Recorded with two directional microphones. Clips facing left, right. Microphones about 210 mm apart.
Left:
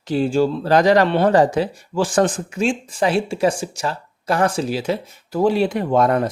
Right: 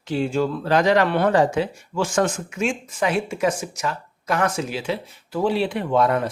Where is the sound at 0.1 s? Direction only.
35° left (ahead or behind).